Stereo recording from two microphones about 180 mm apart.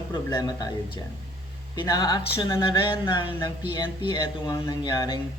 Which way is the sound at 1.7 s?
25° left (ahead or behind).